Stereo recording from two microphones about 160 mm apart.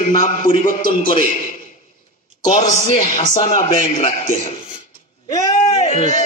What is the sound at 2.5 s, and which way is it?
A man's voice, 50° left (ahead or behind).